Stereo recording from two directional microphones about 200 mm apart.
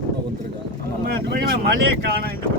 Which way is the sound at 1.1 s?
55° right (ahead or behind).